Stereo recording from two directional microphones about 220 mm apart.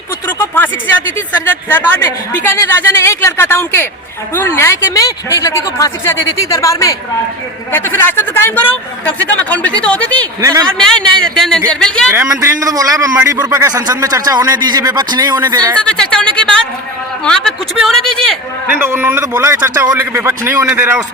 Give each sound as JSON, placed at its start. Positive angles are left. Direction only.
{"t": 0.3, "sound": "a sound", "side_deg": 10}
{"t": 1.5, "sound": "a man's voice", "side_deg": 10}
{"t": 12.1, "sound": "a man's voice", "side_deg": -15}
{"t": 15.8, "sound": "a man's voice", "side_deg": 5}
{"t": 18.8, "sound": "a man's voice", "side_deg": -10}